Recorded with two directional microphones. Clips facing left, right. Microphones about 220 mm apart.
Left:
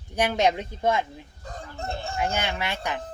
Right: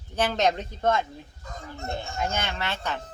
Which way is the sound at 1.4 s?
35° left (ahead or behind).